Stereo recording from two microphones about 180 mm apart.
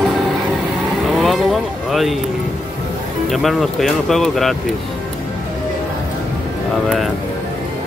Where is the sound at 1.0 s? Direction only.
Centre (ahead or behind).